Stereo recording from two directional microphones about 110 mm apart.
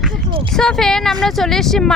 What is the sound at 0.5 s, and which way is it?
Speech, 5° left (ahead or behind).